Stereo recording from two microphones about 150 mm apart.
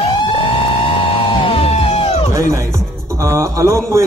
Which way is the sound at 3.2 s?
20° right (ahead or behind).